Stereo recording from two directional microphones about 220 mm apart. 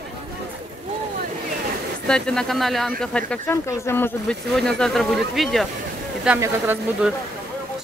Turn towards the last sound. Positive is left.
turn(degrees=-10)  # may be behind; listen again after turning